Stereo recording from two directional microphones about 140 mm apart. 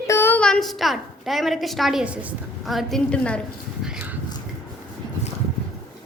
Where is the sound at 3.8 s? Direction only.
5° right (ahead or behind).